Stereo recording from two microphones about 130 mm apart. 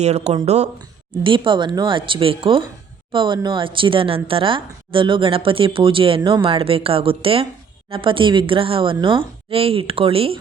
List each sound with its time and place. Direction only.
0.0 s speech: 55° right (ahead or behind)
1.2 s a woman's voice: 40° right (ahead or behind)